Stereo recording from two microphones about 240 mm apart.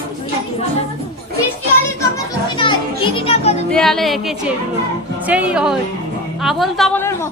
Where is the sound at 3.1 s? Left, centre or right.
Left.